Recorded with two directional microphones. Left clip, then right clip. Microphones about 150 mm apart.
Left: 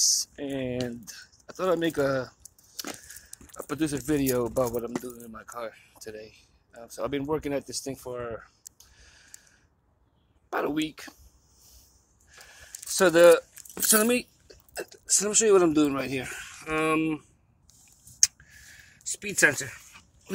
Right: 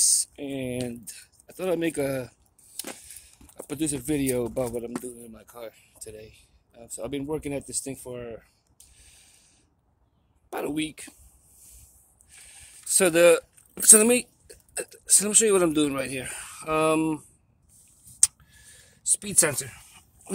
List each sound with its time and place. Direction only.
0.0 s speech: 35° right (ahead or behind)
3.0 s a sound: 30° right (ahead or behind)
3.5 s speech: 25° right (ahead or behind)
8.7 s a sound: 20° right (ahead or behind)
10.5 s speech: 20° right (ahead or behind)
12.3 s a sound: 25° right (ahead or behind)
14.5 s speech: 25° right (ahead or behind)
16.0 s speech: 5° right (ahead or behind)
16.3 s speech: 40° right (ahead or behind)
19.2 s speech: 15° right (ahead or behind)
19.5 s speech: centre (ahead or behind)